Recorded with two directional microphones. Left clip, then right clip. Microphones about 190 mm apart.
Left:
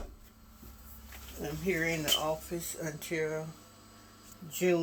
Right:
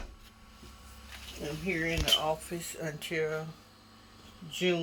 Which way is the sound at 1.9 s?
Centre (ahead or behind).